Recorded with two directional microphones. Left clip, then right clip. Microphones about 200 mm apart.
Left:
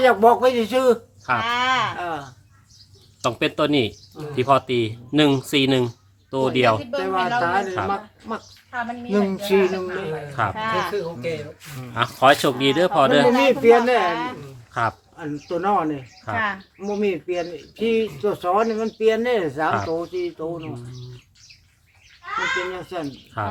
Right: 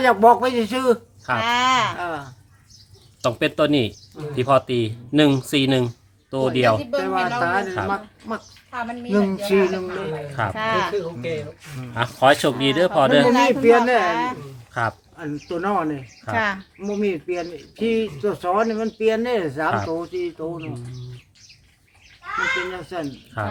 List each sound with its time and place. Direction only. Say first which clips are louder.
0.0 s speech: even; 10° right (ahead or behind)
1.4 s a sound: right 3 dB; 60° right (ahead or behind)
2.0 s a sound: even; 5° right (ahead or behind)
3.2 s speech: right 1 dB; 5° right (ahead or behind)
10.5 s speech: right 2 dB; 60° right (ahead or behind)
11.8 s speech: even; centre (ahead or behind)
14.1 s speech: right 3 dB; 60° right (ahead or behind)
14.7 s speech: left 1 dB; centre (ahead or behind)
16.3 s speech: right 2 dB; 55° right (ahead or behind)
16.8 s speech: left 1 dB; 5° right (ahead or behind)
22.7 s speech: even; 5° right (ahead or behind)